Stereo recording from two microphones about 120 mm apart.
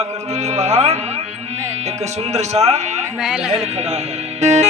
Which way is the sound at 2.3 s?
65° right (ahead or behind).